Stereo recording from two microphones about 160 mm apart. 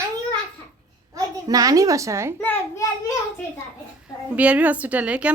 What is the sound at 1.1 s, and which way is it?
A child's voice, 20° right (ahead or behind).